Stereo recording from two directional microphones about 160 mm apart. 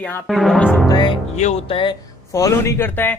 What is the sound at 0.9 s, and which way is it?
Music, 30° left (ahead or behind).